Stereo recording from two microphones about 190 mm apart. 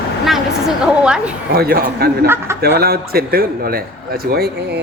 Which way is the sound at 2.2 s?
15° right (ahead or behind).